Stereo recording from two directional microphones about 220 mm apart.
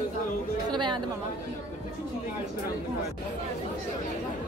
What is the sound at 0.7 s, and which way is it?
Chatter, 20° right (ahead or behind).